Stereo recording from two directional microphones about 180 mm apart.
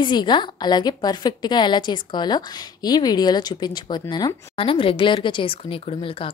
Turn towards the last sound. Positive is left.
turn(degrees=30)  # may be behind; listen again after turning